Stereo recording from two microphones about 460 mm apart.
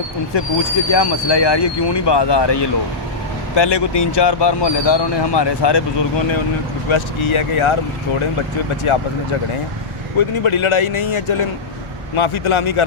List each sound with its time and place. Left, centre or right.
0.3 s speech: left
6.9 s speech: left
8.9 s speech: left
10.2 s speech: left